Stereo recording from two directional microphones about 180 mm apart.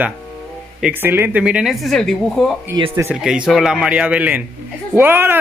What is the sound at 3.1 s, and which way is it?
Speech, 5° right (ahead or behind).